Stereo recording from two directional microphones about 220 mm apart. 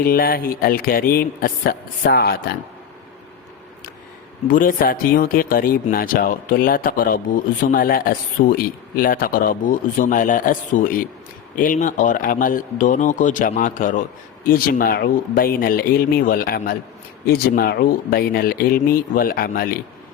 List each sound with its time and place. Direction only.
0.0 s a man's voice: 40° left (ahead or behind)
4.5 s a man's voice: 40° left (ahead or behind)